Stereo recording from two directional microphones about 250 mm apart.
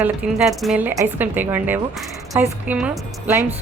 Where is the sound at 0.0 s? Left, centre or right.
Centre.